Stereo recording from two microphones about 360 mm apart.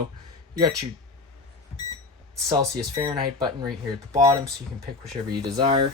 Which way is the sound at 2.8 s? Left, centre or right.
Centre.